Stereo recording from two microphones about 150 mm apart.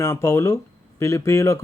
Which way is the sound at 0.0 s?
20° left (ahead or behind).